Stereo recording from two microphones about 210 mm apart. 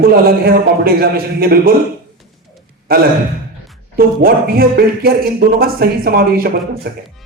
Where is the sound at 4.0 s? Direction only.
45° right (ahead or behind).